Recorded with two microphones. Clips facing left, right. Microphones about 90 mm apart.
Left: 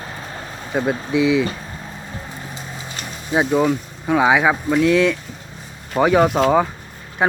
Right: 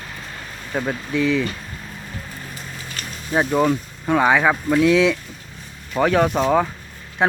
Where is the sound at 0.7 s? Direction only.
20° left (ahead or behind).